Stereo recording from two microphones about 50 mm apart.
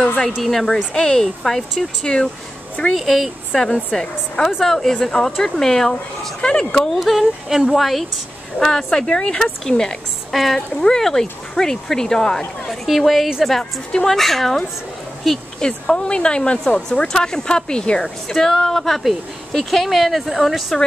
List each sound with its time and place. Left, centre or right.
0.0 s a sound: left
0.4 s speech: centre
2.9 s speech: centre
3.5 s speech: centre
6.9 s speech: centre
12.8 s speech: centre
15.6 s speech: centre